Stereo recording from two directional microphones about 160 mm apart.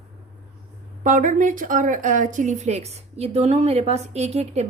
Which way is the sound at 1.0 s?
55° right (ahead or behind).